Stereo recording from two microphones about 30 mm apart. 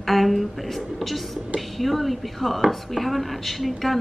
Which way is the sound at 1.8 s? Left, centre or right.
Centre.